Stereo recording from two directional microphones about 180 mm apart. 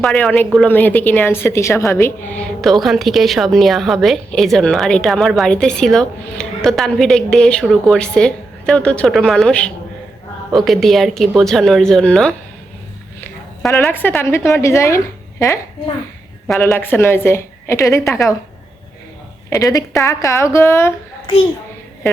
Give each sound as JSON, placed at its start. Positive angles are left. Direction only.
{"t": 0.0, "sound": "a woman's voice", "side_deg": 0}
{"t": 13.8, "sound": "a woman's voice", "side_deg": 10}
{"t": 16.6, "sound": "a woman's voice", "side_deg": 10}
{"t": 19.5, "sound": "a woman's voice", "side_deg": 20}